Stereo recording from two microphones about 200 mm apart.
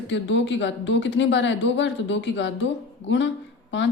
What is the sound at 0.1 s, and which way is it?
Speech, 65° left (ahead or behind).